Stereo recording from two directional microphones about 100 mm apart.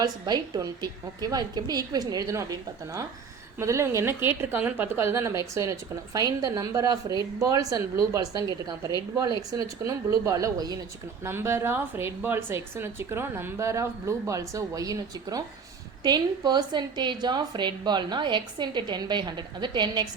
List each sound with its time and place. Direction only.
0.0 s a woman's voice: 45° right (ahead or behind)
11.2 s a woman's voice: 25° right (ahead or behind); by 20.1 s 45° right (ahead or behind)